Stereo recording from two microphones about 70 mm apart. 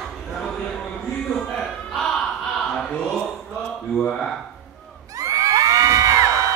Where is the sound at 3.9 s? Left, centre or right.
Centre.